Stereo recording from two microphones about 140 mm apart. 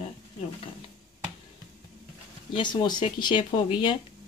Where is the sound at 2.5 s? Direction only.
30° left (ahead or behind).